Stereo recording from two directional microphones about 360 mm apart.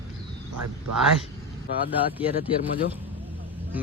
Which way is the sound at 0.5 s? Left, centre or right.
Right.